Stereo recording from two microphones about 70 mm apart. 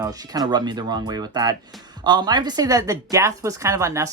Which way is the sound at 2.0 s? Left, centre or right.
Right.